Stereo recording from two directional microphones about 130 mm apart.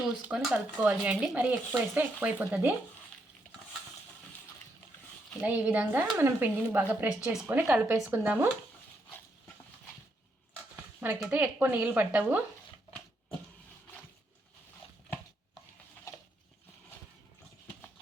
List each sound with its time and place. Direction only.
0.2 s speech: 5° right (ahead or behind)
5.4 s speech: 10° right (ahead or behind)
11.3 s speech: 10° right (ahead or behind)
16.1 s a sound: 20° left (ahead or behind)